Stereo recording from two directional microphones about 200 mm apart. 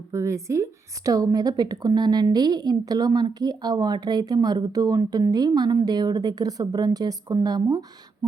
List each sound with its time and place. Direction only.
0.1 s a woman's voice: 15° right (ahead or behind)